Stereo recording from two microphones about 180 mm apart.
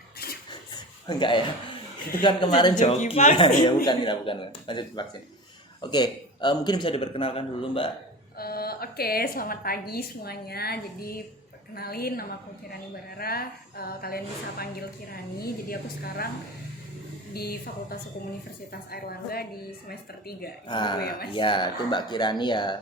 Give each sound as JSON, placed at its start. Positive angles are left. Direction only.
{"t": 0.7, "sound": "a sound", "side_deg": 25}
{"t": 2.2, "sound": "a man's voice", "side_deg": 25}
{"t": 8.4, "sound": "a woman's voice", "side_deg": 60}
{"t": 17.3, "sound": "a woman's voice", "side_deg": 60}
{"t": 20.7, "sound": "a man's voice", "side_deg": 25}